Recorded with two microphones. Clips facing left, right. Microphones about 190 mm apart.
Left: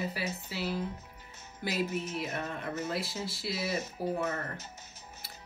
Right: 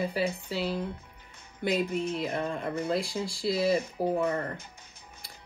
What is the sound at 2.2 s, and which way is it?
Music, 30° right (ahead or behind).